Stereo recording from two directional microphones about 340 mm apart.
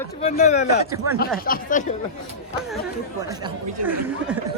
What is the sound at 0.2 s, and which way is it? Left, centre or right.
Speech, centre.